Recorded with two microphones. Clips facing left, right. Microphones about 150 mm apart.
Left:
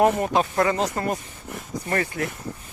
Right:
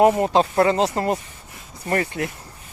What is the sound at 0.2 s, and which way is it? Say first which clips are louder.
Speech: right 4 dB; 30° right (ahead or behind).